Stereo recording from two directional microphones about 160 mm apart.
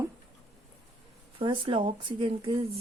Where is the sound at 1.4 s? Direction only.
30° right (ahead or behind).